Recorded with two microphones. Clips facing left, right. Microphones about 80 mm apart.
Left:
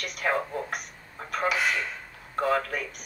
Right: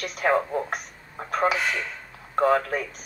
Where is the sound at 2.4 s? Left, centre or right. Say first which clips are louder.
Right 5 dB; right.